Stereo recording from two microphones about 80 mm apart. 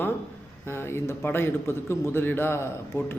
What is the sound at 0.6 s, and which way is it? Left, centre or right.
A man's voice, left.